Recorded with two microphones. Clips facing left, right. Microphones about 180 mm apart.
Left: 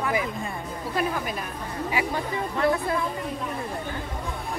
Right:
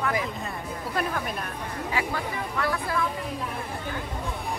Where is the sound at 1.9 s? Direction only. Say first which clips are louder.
Left 2 dB; 20° left (ahead or behind).